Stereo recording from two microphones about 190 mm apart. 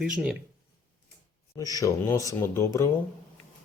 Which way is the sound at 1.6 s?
20° left (ahead or behind).